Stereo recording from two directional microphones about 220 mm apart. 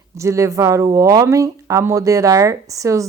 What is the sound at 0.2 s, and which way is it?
Speech, 15° right (ahead or behind).